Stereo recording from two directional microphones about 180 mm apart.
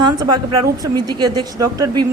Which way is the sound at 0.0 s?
20° right (ahead or behind).